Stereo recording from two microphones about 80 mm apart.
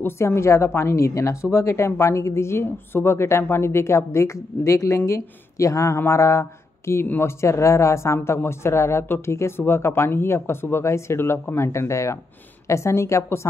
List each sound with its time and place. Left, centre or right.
0.0 s a woman's voice: left